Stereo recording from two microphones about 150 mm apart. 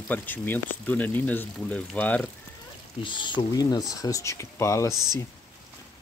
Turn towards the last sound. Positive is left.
turn(degrees=-25)  # may be behind; listen again after turning